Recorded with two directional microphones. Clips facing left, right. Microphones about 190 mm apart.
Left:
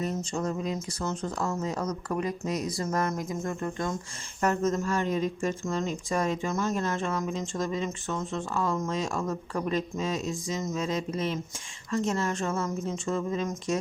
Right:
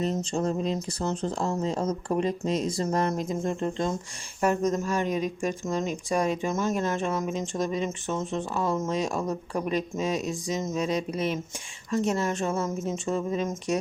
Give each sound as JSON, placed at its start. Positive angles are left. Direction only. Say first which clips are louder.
{"t": 0.0, "sound": "speech", "louder": "right 3 dB", "side_deg": -25}